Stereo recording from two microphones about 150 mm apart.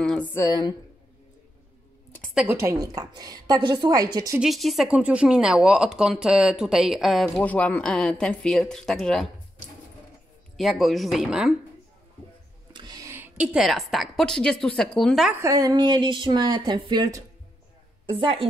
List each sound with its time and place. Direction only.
0.0 s a sound: 5° left (ahead or behind)
0.3 s speech: 15° left (ahead or behind)
2.5 s a woman's voice: 20° right (ahead or behind)
4.4 s speech: centre (ahead or behind)
10.6 s speech: centre (ahead or behind)
12.7 s a woman's voice: 25° right (ahead or behind); by 15.3 s centre (ahead or behind)
15.4 s a woman's voice: 25° right (ahead or behind)
18.1 s a woman's voice: 35° right (ahead or behind)